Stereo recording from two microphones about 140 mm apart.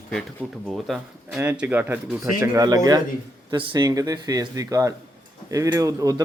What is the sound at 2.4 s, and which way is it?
A man's voice, 25° right (ahead or behind).